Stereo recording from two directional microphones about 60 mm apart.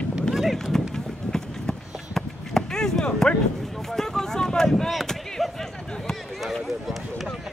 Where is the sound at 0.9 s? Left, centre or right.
Centre.